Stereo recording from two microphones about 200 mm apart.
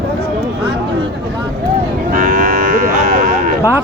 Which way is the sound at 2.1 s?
45° right (ahead or behind).